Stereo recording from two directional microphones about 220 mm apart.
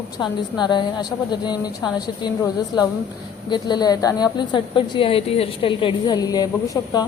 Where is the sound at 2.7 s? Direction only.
20° left (ahead or behind).